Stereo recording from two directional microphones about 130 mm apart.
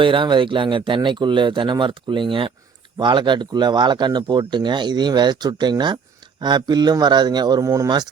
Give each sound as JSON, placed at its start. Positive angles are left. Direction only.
{"t": 0.0, "sound": "speech", "side_deg": -40}